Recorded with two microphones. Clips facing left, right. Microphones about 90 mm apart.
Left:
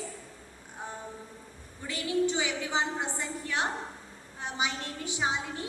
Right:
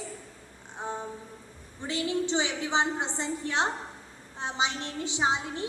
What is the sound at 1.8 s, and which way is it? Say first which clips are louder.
A woman's voice: left 1 dB; 25° right (ahead or behind).